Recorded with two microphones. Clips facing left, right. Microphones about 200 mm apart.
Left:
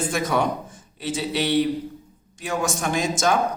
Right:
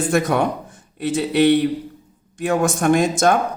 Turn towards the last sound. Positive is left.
turn(degrees=-55)  # may be behind; listen again after turning